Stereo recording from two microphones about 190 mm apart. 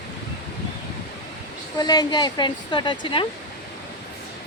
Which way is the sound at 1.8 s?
20° left (ahead or behind).